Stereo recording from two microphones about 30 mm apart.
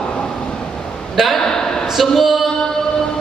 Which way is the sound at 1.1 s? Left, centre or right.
Centre.